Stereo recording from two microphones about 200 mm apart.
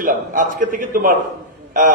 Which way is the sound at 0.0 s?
40° right (ahead or behind).